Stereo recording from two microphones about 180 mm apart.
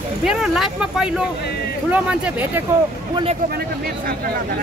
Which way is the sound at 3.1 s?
30° right (ahead or behind).